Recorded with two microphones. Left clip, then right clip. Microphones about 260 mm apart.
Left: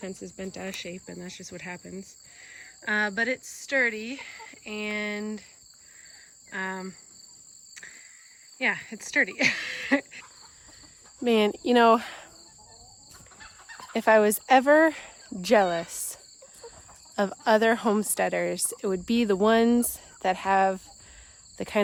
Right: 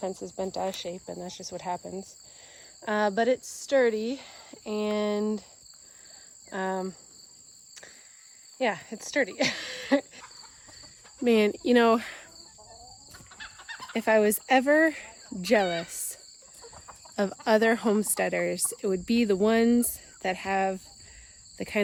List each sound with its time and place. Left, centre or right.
0.0 s speech: right
0.5 s insect: centre
1.0 s speech: centre
6.5 s insect: centre
8.5 s speech: centre
11.2 s speech: centre
13.4 s fowl: right
13.9 s speech: centre